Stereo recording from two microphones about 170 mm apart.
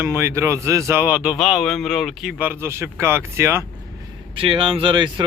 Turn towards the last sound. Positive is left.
turn(degrees=-25)  # may be behind; listen again after turning